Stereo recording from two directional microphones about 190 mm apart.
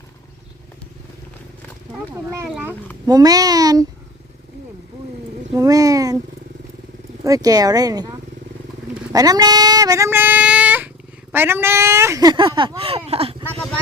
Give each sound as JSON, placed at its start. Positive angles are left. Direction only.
{"t": 2.5, "sound": "speech", "side_deg": -10}
{"t": 3.1, "sound": "speech", "side_deg": -20}
{"t": 5.5, "sound": "a sound", "side_deg": -20}
{"t": 7.3, "sound": "speech", "side_deg": -20}
{"t": 9.1, "sound": "child singing", "side_deg": -20}
{"t": 11.3, "sound": "speech", "side_deg": -10}